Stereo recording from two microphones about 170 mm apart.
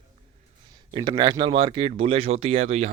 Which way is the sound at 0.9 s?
25° right (ahead or behind).